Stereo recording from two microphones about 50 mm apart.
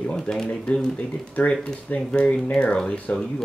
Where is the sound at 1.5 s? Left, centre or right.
Centre.